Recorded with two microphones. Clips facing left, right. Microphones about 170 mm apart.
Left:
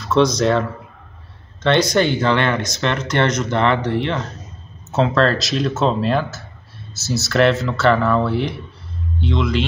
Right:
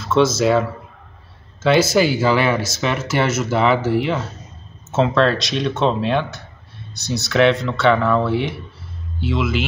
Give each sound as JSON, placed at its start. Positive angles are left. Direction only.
{"t": 0.0, "sound": "speech", "side_deg": 0}